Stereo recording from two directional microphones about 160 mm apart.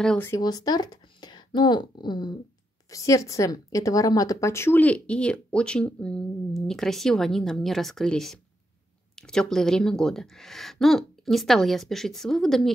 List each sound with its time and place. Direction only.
0.0 s speech: 5° left (ahead or behind)
0.3 s a woman's voice: 25° left (ahead or behind); by 12.7 s centre (ahead or behind)